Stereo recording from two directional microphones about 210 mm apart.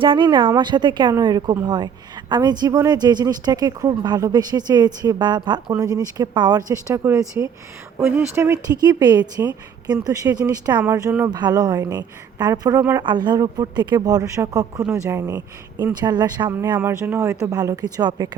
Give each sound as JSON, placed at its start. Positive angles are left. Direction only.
{"t": 0.0, "sound": "speech", "side_deg": -25}